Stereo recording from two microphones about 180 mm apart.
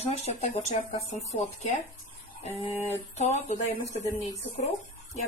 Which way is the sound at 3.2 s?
40° left (ahead or behind).